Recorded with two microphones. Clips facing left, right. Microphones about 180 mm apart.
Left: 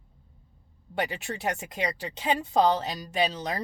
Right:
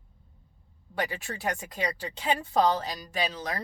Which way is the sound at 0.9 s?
25° left (ahead or behind).